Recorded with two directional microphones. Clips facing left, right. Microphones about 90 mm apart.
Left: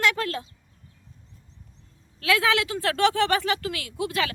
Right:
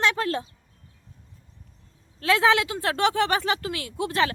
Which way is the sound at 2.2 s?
30° right (ahead or behind).